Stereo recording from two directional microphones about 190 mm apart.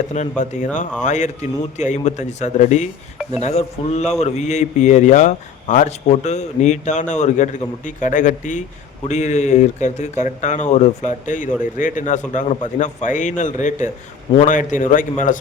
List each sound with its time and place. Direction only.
0.1 s a man's voice: 40° left (ahead or behind)